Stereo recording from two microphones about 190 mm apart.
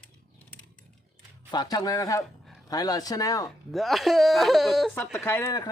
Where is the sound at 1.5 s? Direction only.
20° left (ahead or behind).